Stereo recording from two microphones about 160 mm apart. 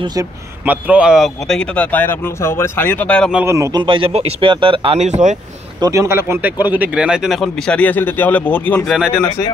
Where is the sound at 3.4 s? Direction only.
20° right (ahead or behind).